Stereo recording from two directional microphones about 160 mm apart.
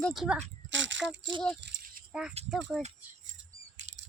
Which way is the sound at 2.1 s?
5° right (ahead or behind).